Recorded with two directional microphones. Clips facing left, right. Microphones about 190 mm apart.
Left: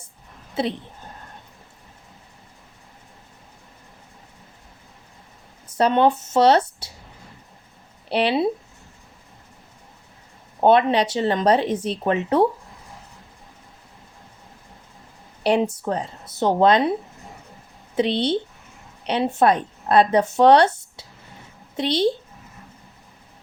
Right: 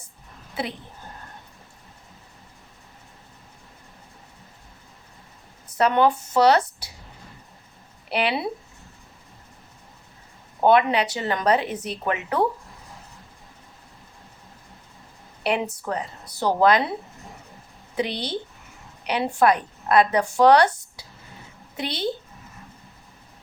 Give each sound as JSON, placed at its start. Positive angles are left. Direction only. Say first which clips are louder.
{"t": 0.6, "sound": "speech", "louder": "left 6 dB", "side_deg": 25}
{"t": 5.7, "sound": "a woman's voice", "louder": "left 2 dB", "side_deg": 25}
{"t": 8.1, "sound": "speech", "louder": "left 5 dB", "side_deg": 30}
{"t": 10.6, "sound": "speech", "louder": "left 2 dB", "side_deg": 25}
{"t": 15.4, "sound": "speech", "louder": "left 5 dB", "side_deg": 30}
{"t": 17.9, "sound": "a woman's voice", "louder": "left 6 dB", "side_deg": 25}